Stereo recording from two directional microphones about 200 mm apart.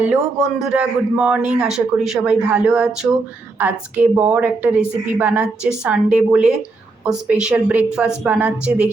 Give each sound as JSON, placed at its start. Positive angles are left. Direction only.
{"t": 0.0, "sound": "a man's voice", "side_deg": -5}